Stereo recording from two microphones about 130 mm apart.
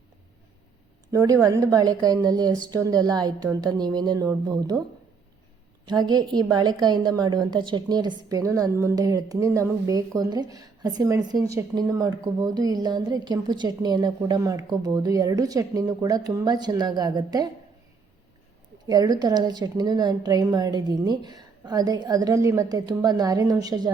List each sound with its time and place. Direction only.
1.1 s a woman's voice: 25° right (ahead or behind)
5.8 s a woman's voice: 35° right (ahead or behind)
18.9 s a woman's voice: 30° right (ahead or behind)